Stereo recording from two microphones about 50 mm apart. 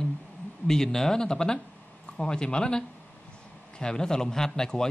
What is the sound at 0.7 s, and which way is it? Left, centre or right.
Speech, centre.